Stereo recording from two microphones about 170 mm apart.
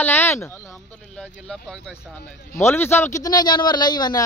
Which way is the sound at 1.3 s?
5° left (ahead or behind).